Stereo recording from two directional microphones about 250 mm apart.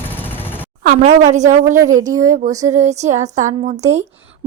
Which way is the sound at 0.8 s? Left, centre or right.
Right.